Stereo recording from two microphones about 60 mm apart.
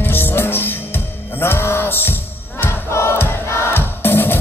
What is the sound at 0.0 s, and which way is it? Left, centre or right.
Music, left.